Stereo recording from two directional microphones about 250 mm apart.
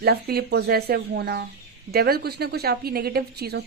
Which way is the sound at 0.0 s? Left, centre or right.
Right.